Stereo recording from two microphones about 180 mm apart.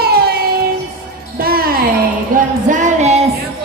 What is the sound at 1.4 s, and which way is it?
Music, 55° right (ahead or behind).